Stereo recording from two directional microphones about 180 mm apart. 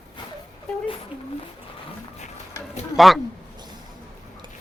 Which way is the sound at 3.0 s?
Centre (ahead or behind).